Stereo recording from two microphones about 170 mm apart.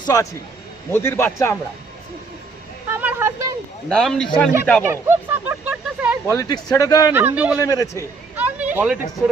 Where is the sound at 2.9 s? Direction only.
10° right (ahead or behind).